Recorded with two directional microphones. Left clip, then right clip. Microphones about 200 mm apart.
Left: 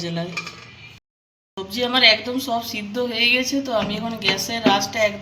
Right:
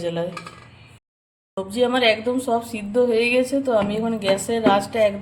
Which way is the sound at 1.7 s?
50° right (ahead or behind).